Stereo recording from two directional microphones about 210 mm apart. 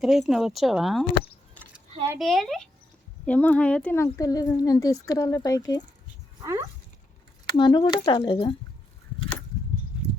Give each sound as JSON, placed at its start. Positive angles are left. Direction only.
{"t": 0.0, "sound": "speech", "side_deg": 0}
{"t": 2.1, "sound": "speech", "side_deg": 0}
{"t": 6.4, "sound": "speech", "side_deg": -15}
{"t": 7.4, "sound": "speech", "side_deg": 20}